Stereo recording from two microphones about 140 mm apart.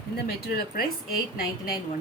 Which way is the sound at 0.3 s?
90° left.